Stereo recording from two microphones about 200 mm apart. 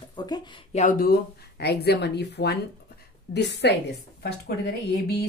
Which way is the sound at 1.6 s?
55° left (ahead or behind).